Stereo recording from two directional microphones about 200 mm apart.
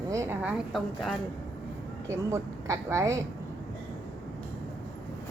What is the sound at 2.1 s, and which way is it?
A woman's voice, 15° right (ahead or behind).